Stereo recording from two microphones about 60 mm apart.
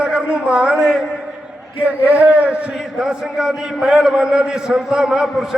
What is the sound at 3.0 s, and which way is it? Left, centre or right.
A man's voice, centre.